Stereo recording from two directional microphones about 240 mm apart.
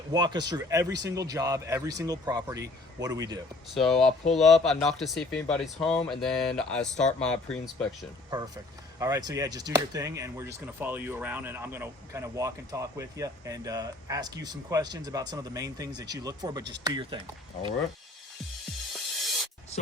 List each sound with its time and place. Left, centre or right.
0.1 s speech: centre
3.8 s speech: centre
9.0 s speech: centre
18.9 s music: centre